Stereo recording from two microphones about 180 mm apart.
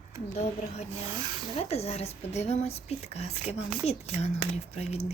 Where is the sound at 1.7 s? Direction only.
35° left (ahead or behind).